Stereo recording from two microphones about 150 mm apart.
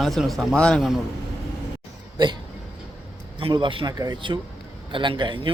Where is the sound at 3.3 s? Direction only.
35° right (ahead or behind).